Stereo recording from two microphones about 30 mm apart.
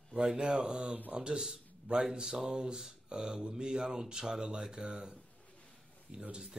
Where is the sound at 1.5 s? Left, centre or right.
Right.